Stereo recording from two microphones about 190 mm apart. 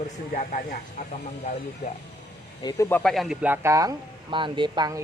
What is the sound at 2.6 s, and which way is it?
Speech, 20° left (ahead or behind).